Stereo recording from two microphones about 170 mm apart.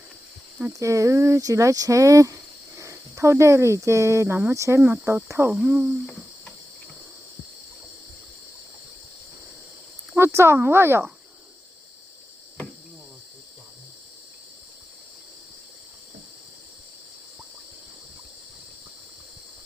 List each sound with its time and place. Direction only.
0.6 s speech: 20° right (ahead or behind)
10.1 s speech: 15° right (ahead or behind)